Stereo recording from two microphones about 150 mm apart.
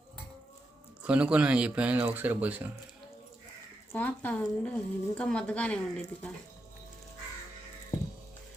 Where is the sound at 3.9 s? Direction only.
10° left (ahead or behind).